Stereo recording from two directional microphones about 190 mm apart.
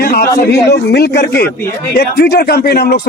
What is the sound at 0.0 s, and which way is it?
A man's voice, 55° left (ahead or behind).